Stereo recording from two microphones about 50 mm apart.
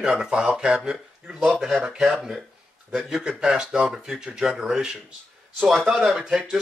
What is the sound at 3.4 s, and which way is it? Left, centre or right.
Speech, centre.